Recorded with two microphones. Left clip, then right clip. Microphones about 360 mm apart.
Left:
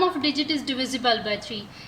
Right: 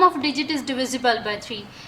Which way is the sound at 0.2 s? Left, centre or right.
Centre.